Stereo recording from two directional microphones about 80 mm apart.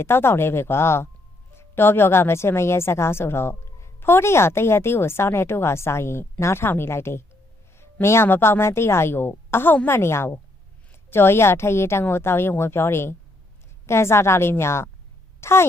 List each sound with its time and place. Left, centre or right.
0.0 s a woman's voice: left